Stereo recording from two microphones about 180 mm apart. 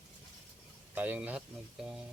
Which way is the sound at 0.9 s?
10° right (ahead or behind).